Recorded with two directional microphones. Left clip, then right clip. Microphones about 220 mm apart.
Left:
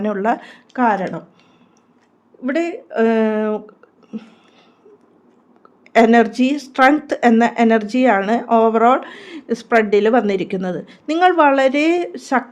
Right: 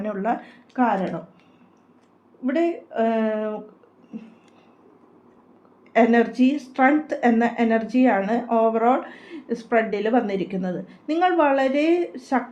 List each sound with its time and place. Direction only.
0.0 s speech: 45° left (ahead or behind)
2.4 s speech: 50° left (ahead or behind)
5.9 s speech: 50° left (ahead or behind)